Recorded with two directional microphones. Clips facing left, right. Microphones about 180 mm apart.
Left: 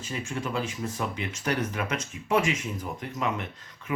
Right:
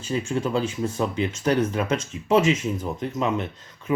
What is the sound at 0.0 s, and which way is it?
Speech, 30° right (ahead or behind).